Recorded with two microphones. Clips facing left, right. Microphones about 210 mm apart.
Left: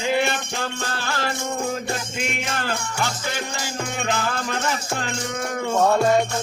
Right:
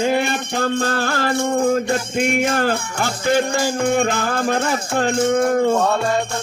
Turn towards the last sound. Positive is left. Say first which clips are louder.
# right 11 dB
turn(degrees=-50)  # may be behind; listen again after turning